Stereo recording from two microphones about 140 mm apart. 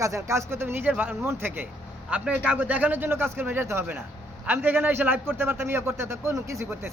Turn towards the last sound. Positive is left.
turn(degrees=-20)  # may be behind; listen again after turning